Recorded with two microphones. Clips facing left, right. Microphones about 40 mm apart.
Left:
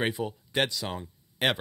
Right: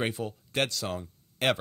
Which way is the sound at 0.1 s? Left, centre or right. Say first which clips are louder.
Left 2 dB; centre.